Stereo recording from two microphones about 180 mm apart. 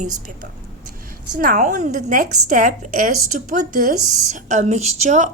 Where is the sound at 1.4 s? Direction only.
45° right (ahead or behind).